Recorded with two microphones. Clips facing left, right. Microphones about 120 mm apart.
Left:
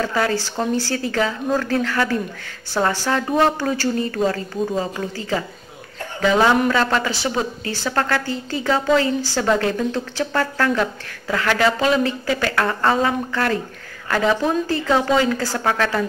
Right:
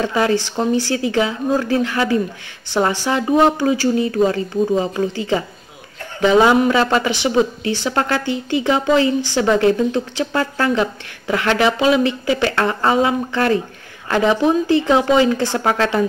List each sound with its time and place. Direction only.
0.0 s a woman's voice: 20° right (ahead or behind)
6.3 s speech: 15° right (ahead or behind)
13.3 s a woman's voice: 25° right (ahead or behind)